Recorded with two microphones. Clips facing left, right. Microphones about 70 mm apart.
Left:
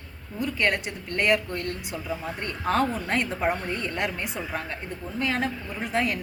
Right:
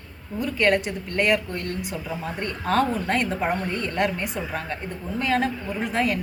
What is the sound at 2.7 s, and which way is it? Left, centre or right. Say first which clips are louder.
A woman's voice: right 2 dB; centre.